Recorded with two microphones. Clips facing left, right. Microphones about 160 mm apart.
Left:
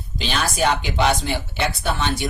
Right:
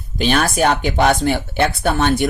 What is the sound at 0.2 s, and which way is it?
Speech, 55° right (ahead or behind).